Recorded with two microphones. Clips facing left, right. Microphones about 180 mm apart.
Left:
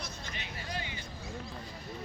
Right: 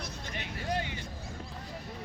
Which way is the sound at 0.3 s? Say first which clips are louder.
Right 7 dB; 55° right (ahead or behind).